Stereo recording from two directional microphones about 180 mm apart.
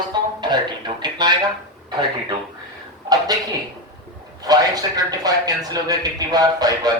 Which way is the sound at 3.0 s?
20° right (ahead or behind).